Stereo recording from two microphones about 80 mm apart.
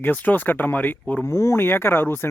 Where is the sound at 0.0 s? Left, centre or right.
Left.